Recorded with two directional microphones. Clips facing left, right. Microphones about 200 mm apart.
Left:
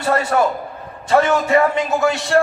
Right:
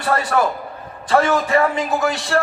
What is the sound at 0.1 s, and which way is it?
A man's voice, 25° left (ahead or behind).